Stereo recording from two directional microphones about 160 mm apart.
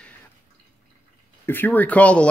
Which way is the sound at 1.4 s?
10° left (ahead or behind).